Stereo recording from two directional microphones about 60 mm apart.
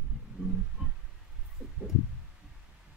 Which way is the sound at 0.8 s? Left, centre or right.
Centre.